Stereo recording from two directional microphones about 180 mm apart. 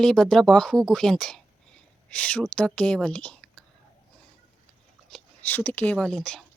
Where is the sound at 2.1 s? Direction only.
5° left (ahead or behind).